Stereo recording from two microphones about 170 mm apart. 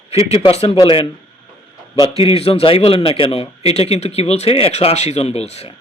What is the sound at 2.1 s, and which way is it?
A man's voice, 35° left (ahead or behind).